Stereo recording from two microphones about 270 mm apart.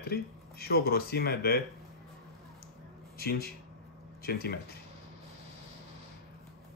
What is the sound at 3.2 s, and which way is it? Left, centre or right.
Speech, left.